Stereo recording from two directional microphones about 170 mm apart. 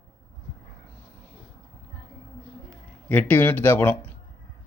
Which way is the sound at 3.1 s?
10° left (ahead or behind).